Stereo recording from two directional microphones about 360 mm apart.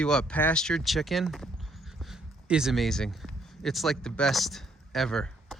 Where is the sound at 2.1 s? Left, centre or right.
Centre.